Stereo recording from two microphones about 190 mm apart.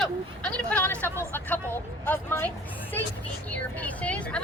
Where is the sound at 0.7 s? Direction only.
10° left (ahead or behind).